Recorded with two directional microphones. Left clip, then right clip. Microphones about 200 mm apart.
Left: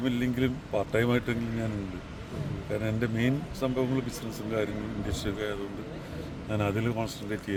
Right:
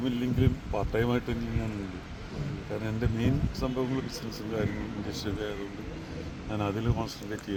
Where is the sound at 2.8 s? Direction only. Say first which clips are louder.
Left 2 dB; 15° left (ahead or behind).